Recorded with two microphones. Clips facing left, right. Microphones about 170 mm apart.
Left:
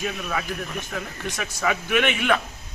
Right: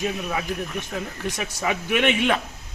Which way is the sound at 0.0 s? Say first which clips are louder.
Right 2 dB; 20° right (ahead or behind).